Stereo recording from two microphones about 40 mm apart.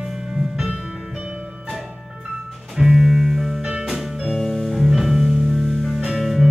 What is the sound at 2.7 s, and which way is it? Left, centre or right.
Music, centre.